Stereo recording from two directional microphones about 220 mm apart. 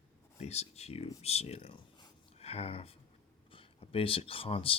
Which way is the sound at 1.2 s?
30° left (ahead or behind).